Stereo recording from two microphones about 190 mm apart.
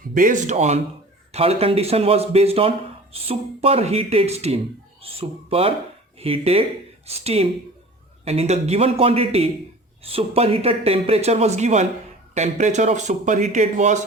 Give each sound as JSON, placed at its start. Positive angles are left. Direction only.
{"t": 0.1, "sound": "speech", "side_deg": -45}